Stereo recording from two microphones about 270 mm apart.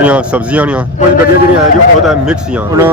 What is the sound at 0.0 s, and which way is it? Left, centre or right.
Speech, centre.